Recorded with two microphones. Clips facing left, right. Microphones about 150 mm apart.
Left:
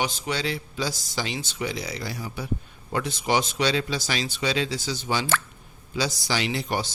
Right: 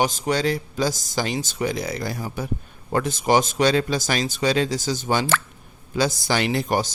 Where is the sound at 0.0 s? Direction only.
45° right (ahead or behind).